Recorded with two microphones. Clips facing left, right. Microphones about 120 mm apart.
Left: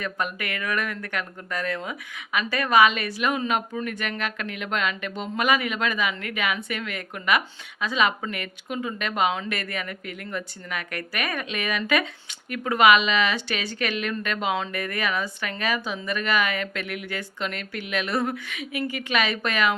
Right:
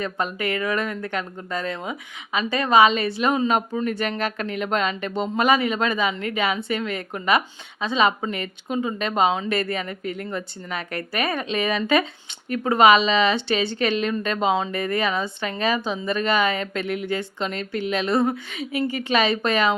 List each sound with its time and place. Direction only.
0.0 s speech: 30° right (ahead or behind)